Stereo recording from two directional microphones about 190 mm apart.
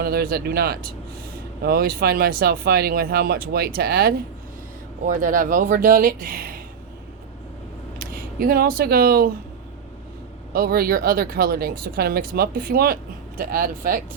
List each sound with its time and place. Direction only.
0.0 s speech: 55° right (ahead or behind)
7.9 s speech: 50° right (ahead or behind)
10.5 s speech: 50° right (ahead or behind)